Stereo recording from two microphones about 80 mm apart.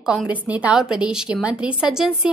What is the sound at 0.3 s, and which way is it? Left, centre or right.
A woman's voice, centre.